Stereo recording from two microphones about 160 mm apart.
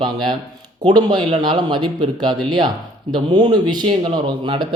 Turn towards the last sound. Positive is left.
turn(degrees=-30)  # may be behind; listen again after turning